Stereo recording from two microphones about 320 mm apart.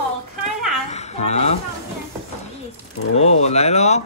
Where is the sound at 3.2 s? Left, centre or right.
Centre.